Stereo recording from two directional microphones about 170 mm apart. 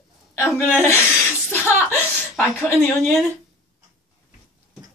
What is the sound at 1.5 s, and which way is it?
Chuckle, 15° left (ahead or behind).